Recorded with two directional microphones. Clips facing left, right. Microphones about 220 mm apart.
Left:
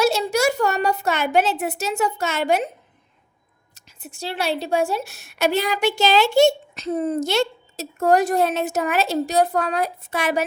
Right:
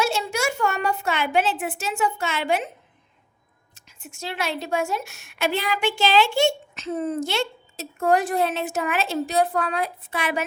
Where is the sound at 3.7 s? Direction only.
35° left (ahead or behind).